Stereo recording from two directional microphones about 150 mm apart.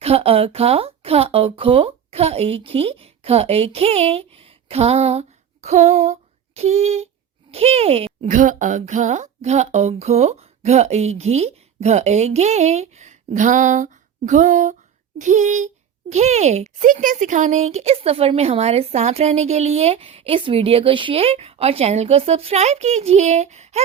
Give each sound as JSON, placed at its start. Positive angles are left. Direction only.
{"t": 0.0, "sound": "speech", "side_deg": -40}
{"t": 5.6, "sound": "a sound", "side_deg": -45}
{"t": 7.5, "sound": "speech", "side_deg": -40}
{"t": 8.3, "sound": "a child's voice", "side_deg": -60}